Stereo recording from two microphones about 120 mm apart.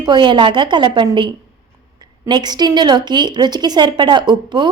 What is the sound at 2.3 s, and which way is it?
A woman's voice, 35° right (ahead or behind).